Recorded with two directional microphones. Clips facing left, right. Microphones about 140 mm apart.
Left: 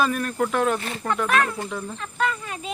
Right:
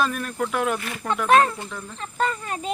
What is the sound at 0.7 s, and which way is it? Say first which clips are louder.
Speech: left 2 dB; 30° left (ahead or behind).